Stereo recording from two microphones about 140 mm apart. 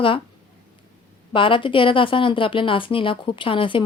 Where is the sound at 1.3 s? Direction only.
35° left (ahead or behind).